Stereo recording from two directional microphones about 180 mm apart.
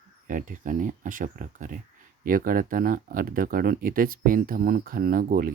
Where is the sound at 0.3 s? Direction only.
50° right (ahead or behind).